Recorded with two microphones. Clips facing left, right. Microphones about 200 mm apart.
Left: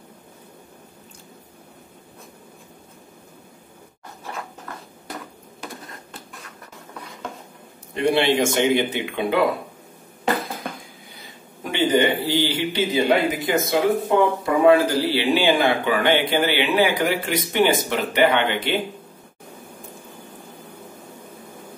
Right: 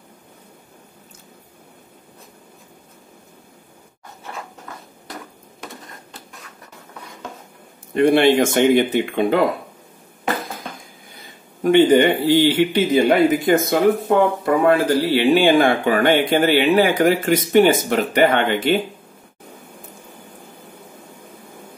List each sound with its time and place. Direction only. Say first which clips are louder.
7.9 s speech: right 5 dB; 55° right (ahead or behind)
11.7 s speech: right 6 dB; 55° right (ahead or behind)